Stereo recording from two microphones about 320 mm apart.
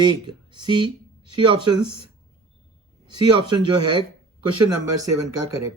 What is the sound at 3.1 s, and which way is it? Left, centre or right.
Speech, centre.